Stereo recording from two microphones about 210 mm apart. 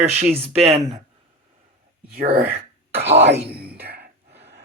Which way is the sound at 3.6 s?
10° right (ahead or behind).